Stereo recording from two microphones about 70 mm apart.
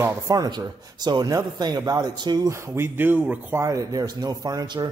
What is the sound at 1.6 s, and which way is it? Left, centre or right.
Speech, right.